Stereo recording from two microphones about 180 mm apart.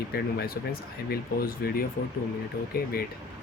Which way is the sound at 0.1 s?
60° left (ahead or behind).